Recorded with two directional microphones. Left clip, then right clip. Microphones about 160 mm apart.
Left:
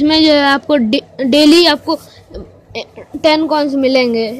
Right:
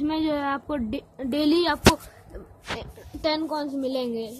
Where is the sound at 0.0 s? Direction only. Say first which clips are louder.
Left 16 dB; 15° left (ahead or behind).